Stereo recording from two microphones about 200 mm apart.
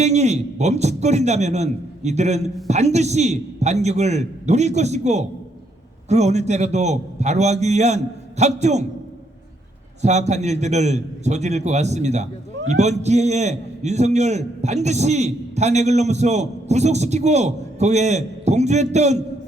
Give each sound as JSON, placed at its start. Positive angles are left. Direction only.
{"t": 0.0, "sound": "a man's voice", "side_deg": -35}
{"t": 10.0, "sound": "a man's voice", "side_deg": -35}